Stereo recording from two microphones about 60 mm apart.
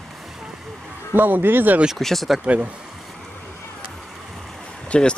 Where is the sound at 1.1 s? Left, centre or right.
Right.